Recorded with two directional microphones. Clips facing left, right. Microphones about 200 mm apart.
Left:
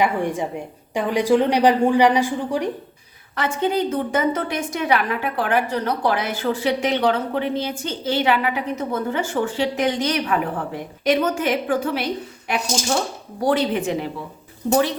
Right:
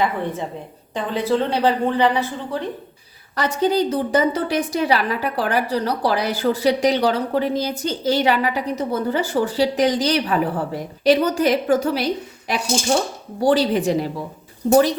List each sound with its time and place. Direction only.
0.0 s a woman's voice: 15° left (ahead or behind)
3.3 s a woman's voice: 40° right (ahead or behind)